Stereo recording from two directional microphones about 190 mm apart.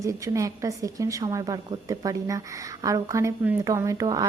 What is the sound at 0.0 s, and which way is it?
A woman's voice, 15° right (ahead or behind).